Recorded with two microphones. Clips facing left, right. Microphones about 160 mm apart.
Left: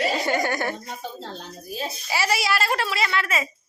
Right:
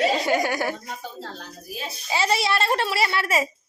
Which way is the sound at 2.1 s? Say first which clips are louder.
Right 2 dB; 20° right (ahead or behind).